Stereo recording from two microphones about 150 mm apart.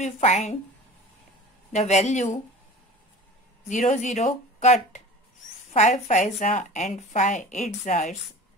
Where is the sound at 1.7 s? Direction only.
50° left (ahead or behind).